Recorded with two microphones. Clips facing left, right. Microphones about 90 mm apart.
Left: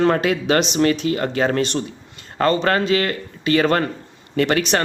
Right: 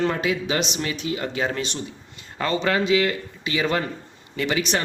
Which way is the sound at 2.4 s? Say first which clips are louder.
Left 5 dB; 50° left (ahead or behind).